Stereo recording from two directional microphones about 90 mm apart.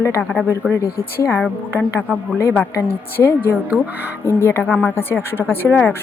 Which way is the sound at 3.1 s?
25° left (ahead or behind).